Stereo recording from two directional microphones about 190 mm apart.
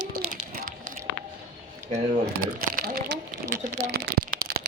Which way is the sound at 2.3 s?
50° right (ahead or behind).